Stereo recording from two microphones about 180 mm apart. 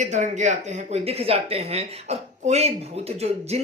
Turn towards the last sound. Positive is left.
turn(degrees=-35)  # may be behind; listen again after turning